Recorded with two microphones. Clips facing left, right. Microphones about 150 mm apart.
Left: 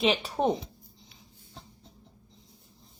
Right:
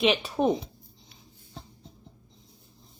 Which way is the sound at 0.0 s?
30° left (ahead or behind).